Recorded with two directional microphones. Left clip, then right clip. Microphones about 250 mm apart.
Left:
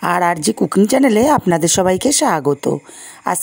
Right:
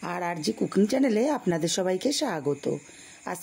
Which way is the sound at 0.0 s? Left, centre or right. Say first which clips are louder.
Left 15 dB; left.